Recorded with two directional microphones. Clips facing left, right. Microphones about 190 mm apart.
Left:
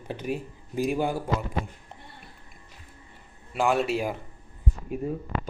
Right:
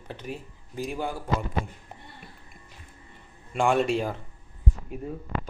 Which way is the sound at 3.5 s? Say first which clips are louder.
Right 1 dB; 5° left (ahead or behind).